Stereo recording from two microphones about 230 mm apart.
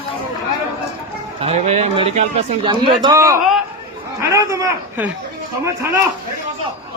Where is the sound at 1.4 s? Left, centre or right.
Right; by 6.0 s centre.